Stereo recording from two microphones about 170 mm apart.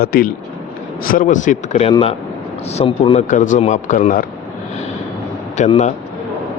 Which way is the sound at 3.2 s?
45° left (ahead or behind).